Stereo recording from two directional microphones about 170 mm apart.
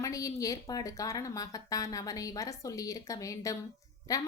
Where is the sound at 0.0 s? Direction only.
20° left (ahead or behind).